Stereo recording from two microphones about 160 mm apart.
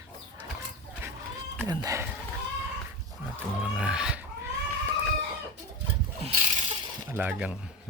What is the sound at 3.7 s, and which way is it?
Speech, 5° right (ahead or behind).